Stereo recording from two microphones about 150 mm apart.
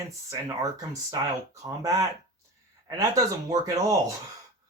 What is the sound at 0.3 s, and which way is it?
Speech, 20° right (ahead or behind).